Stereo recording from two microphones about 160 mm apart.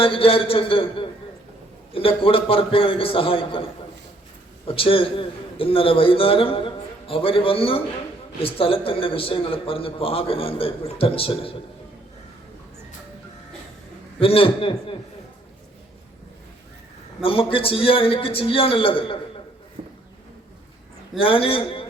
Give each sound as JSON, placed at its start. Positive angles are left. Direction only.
{"t": 0.0, "sound": "a man's voice", "side_deg": 35}
{"t": 14.2, "sound": "a man's voice", "side_deg": 35}
{"t": 17.2, "sound": "a man's voice", "side_deg": 35}
{"t": 21.2, "sound": "a man's voice", "side_deg": 35}